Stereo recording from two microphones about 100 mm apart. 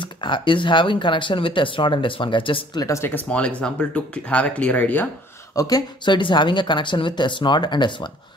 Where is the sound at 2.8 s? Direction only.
25° left (ahead or behind).